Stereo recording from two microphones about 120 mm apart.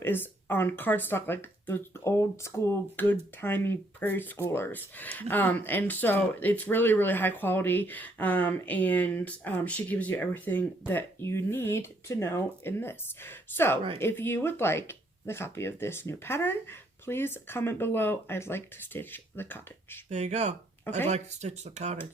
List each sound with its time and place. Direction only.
0.0 s speech: 15° left (ahead or behind)
20.1 s speech: 75° right (ahead or behind)